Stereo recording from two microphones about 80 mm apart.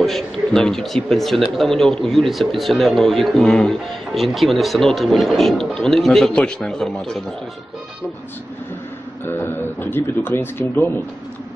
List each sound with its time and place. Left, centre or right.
0.0 s a man's voice: centre
9.2 s a man's voice: left